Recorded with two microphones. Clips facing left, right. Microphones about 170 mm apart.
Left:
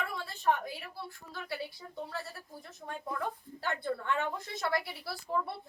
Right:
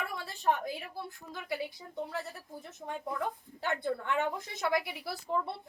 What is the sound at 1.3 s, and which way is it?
Speech, 15° right (ahead or behind).